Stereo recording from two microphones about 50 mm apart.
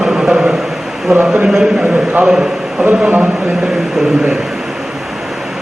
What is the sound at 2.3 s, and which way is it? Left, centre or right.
Speech, centre.